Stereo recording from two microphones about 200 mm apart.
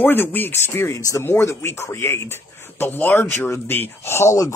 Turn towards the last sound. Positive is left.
turn(degrees=15)  # may be behind; listen again after turning